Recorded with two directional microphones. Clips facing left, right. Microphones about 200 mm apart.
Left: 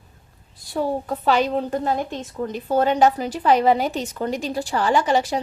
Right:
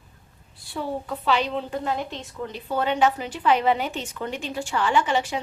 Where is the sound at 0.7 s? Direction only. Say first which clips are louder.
Left 6 dB; 40° left (ahead or behind).